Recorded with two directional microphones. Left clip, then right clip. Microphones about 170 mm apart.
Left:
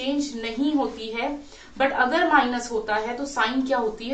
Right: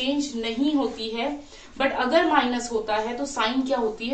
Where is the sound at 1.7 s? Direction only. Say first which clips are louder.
Even; 10° left (ahead or behind).